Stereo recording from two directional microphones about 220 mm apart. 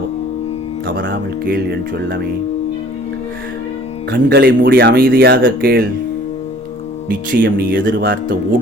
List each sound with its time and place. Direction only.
0.9 s speech: 55° right (ahead or behind)
4.1 s speech: 45° right (ahead or behind)
7.3 s speech: 45° right (ahead or behind)